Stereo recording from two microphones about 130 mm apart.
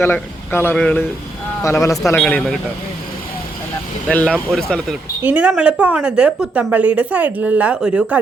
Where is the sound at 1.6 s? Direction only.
25° left (ahead or behind).